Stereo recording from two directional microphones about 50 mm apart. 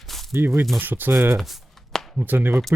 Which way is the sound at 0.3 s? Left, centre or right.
Right.